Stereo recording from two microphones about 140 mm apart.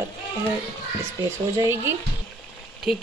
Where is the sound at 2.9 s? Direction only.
5° right (ahead or behind).